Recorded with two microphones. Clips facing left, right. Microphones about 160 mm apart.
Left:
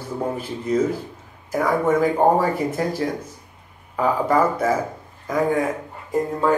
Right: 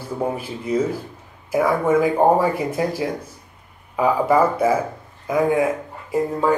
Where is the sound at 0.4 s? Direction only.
10° right (ahead or behind).